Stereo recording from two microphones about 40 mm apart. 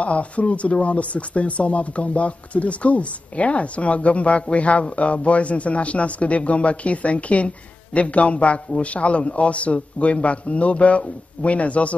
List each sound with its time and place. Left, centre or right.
0.0 s speech: left